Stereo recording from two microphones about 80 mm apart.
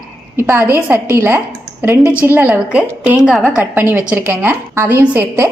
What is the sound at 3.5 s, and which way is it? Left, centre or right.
A woman's voice, right.